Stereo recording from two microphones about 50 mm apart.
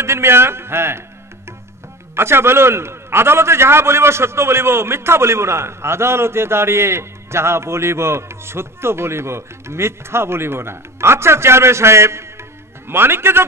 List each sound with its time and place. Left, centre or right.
0.0 s a man's voice: right
2.1 s a man's voice: right
12.8 s a man's voice: right